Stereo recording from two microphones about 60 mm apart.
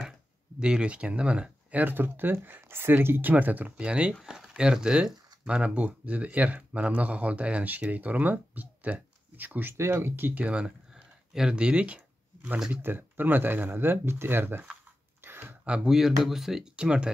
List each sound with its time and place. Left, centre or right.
0.6 s speech: centre
3.7 s speech: centre
9.8 s speech: right
10.4 s a sound: centre
12.5 s speech: centre
12.8 s speech: right
15.2 s a sound: right
15.6 s speech: centre
15.9 s speech: centre